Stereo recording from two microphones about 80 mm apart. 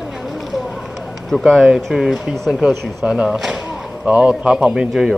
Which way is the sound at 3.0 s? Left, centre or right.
Centre.